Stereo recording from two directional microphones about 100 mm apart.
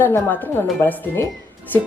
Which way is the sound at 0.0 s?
20° left (ahead or behind).